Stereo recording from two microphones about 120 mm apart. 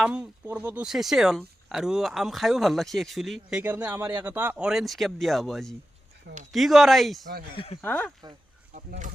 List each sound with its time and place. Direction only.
0.0 s speech: 10° right (ahead or behind)
0.9 s speech: 5° right (ahead or behind)
3.6 s speech: 15° right (ahead or behind)
7.5 s speech: 50° left (ahead or behind)
7.8 s speech: 15° left (ahead or behind)
8.7 s a sound: 90° right